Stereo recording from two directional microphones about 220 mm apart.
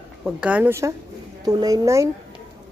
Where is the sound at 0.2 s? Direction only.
5° right (ahead or behind).